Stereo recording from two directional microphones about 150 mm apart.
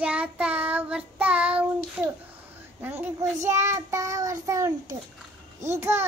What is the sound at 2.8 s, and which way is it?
Child singing, 15° right (ahead or behind).